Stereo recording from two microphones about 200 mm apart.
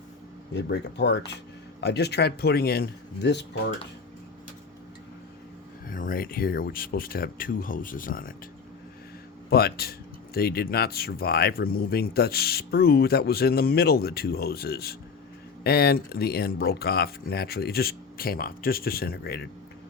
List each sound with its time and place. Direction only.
0.5 s speech: 60° left (ahead or behind)
5.9 s speech: 45° left (ahead or behind)
9.5 s speech: 50° left (ahead or behind)